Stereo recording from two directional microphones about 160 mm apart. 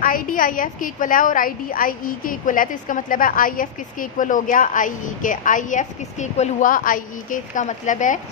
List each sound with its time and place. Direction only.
0.0 s a woman's voice: 60° left (ahead or behind)